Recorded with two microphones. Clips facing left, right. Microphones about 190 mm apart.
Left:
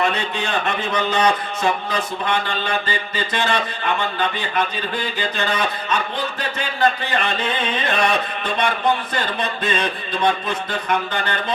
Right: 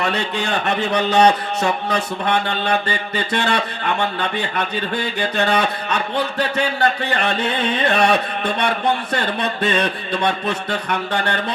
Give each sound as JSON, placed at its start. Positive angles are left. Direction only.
{"t": 0.1, "sound": "speech", "side_deg": -70}
{"t": 5.2, "sound": "speech", "side_deg": -65}